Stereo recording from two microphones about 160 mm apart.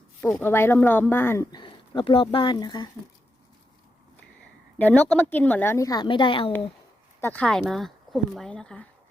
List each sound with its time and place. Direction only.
0.3 s a woman's voice: 15° left (ahead or behind)
1.5 s speech: 25° left (ahead or behind)
4.8 s a woman's voice: 10° left (ahead or behind); by 6.5 s 35° left (ahead or behind)
7.2 s speech: 10° left (ahead or behind)